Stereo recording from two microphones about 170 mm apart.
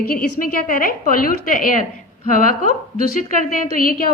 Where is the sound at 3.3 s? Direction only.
50° left (ahead or behind).